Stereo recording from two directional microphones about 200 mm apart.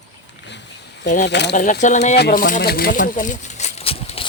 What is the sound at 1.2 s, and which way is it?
Speech, 60° left (ahead or behind).